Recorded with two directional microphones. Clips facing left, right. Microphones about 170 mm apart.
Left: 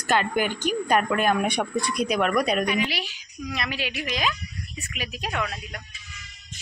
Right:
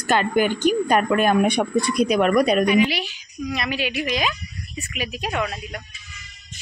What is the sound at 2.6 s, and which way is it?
Speech, 10° right (ahead or behind).